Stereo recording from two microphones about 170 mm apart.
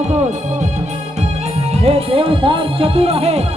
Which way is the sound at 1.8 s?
35° right (ahead or behind).